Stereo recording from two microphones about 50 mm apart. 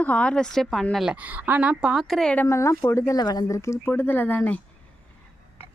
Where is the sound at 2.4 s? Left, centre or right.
Left.